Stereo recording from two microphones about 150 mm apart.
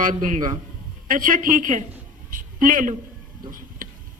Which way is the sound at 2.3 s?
65° right (ahead or behind).